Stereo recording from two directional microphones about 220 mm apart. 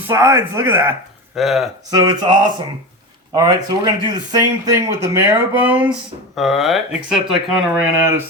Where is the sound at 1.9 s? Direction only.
20° right (ahead or behind).